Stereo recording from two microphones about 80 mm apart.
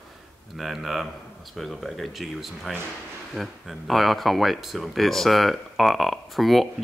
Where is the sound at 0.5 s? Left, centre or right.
Centre.